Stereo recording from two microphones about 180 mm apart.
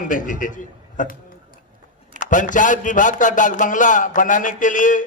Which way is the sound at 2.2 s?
45° left (ahead or behind).